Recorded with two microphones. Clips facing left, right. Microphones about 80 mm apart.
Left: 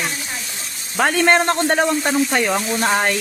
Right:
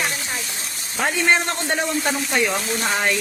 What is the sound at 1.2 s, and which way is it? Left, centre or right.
Speech, left.